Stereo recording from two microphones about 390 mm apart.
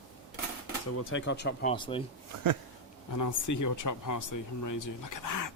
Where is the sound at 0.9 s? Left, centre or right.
Left; by 2.0 s centre.